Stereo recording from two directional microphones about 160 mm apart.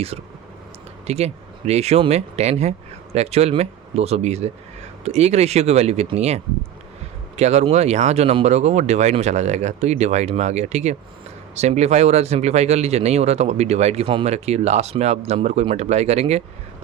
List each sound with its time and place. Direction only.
0.1 s speech: 40° right (ahead or behind)